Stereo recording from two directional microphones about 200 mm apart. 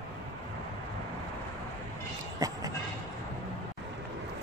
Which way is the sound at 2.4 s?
15° right (ahead or behind).